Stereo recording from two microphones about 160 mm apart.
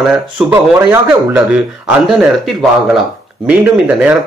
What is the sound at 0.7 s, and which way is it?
Speech, 15° right (ahead or behind).